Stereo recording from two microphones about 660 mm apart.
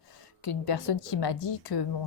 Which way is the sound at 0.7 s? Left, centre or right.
Left.